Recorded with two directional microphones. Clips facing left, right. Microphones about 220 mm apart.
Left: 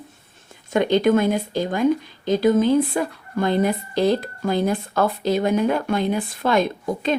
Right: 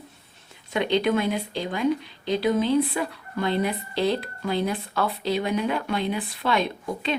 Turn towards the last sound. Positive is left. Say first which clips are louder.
# left 5 dB
turn(degrees=45)  # may be behind; listen again after turning